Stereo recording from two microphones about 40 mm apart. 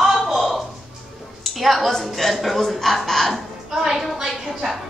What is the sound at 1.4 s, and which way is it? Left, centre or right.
A woman's voice, centre.